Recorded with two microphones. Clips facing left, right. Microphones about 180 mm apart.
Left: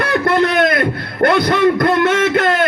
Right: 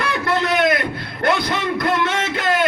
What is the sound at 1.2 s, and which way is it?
Speech, 60° left (ahead or behind).